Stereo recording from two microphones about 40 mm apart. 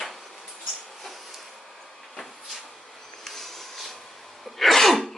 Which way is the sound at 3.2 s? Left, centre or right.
Centre.